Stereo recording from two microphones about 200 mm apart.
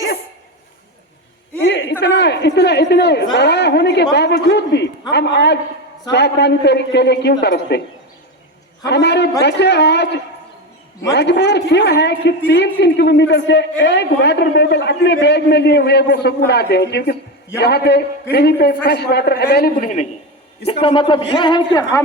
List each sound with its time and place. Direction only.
1.6 s a woman's voice: 60° left (ahead or behind)
8.8 s a man's voice: 60° left (ahead or behind); by 20.1 s 40° left (ahead or behind)
20.7 s a man's voice: 25° left (ahead or behind)